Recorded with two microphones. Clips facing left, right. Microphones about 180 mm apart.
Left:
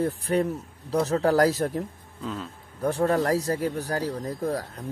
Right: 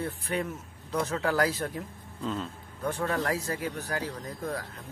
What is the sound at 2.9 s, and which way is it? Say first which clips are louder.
Speech: left 7 dB; 40° left (ahead or behind).